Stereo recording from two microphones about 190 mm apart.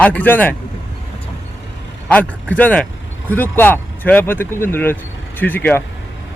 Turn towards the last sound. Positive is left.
turn(degrees=10)  # may be behind; listen again after turning